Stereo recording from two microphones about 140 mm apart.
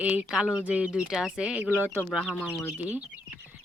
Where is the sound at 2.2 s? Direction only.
10° left (ahead or behind).